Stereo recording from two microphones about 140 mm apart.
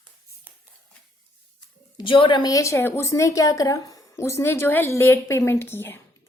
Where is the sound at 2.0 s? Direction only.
35° left (ahead or behind).